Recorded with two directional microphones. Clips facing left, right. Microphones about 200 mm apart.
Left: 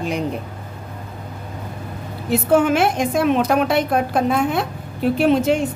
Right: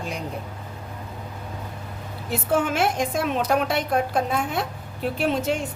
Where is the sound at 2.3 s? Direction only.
70° left (ahead or behind).